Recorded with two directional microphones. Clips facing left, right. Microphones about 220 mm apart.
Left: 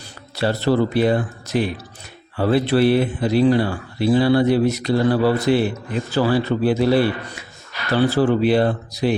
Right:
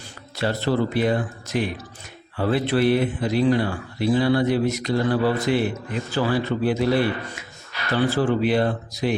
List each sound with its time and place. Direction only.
0.3 s speech: 35° left (ahead or behind)